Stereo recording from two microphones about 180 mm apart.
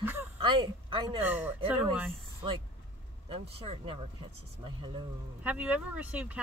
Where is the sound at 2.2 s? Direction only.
30° right (ahead or behind).